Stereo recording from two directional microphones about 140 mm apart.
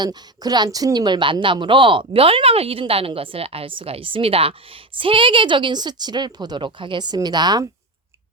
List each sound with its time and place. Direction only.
0.0 s a woman's voice: 30° right (ahead or behind)